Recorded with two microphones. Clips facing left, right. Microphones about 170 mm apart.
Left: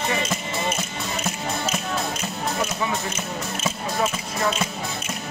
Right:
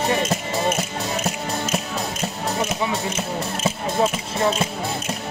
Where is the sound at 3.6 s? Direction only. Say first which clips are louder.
Right 4 dB; 30° right (ahead or behind).